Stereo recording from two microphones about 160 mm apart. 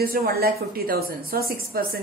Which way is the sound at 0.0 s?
70° right (ahead or behind).